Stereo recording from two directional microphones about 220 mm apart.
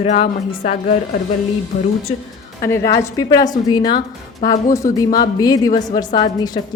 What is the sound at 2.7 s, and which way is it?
A woman's voice, 15° left (ahead or behind).